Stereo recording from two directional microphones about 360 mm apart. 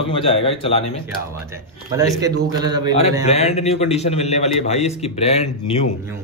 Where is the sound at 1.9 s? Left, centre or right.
Centre.